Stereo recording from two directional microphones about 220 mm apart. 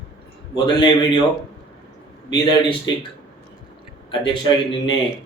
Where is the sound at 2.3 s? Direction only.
20° left (ahead or behind).